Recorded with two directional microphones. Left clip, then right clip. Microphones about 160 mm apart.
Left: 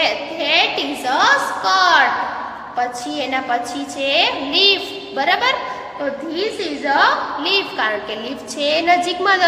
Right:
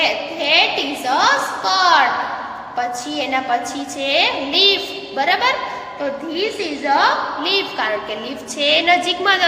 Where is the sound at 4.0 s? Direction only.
5° left (ahead or behind).